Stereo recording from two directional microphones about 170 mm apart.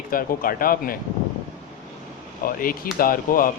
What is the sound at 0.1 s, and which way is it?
Speech, 55° left (ahead or behind).